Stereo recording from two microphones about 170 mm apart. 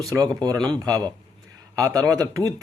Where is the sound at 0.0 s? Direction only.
20° right (ahead or behind).